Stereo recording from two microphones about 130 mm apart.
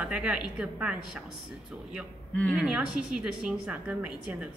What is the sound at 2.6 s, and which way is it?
A woman's voice, 5° right (ahead or behind).